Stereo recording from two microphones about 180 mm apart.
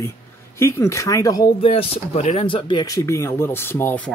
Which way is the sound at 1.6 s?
35° left (ahead or behind).